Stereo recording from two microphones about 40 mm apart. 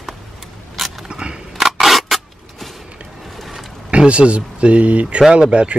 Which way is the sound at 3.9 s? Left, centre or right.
Right.